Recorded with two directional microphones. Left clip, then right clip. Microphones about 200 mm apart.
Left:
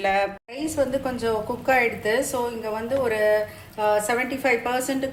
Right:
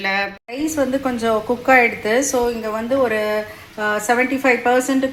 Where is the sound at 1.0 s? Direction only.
30° right (ahead or behind).